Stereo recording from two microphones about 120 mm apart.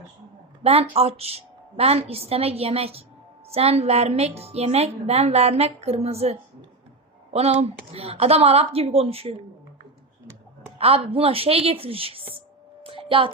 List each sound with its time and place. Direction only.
0.6 s a woman's voice: 55° right (ahead or behind)
7.3 s a woman's voice: 60° right (ahead or behind)
10.8 s a woman's voice: 55° right (ahead or behind)